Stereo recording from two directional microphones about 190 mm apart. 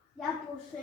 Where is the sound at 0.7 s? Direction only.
Centre (ahead or behind).